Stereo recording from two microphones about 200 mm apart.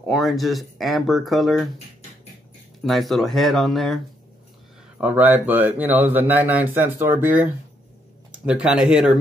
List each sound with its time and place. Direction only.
0.0 s speech: centre (ahead or behind)
2.8 s speech: centre (ahead or behind)
5.0 s speech: 10° right (ahead or behind)
8.5 s speech: 5° right (ahead or behind)